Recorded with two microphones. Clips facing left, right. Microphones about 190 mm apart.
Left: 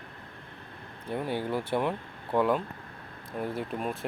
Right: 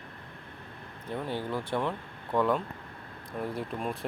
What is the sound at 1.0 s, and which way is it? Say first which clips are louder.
Speech: left 2 dB; 10° left (ahead or behind).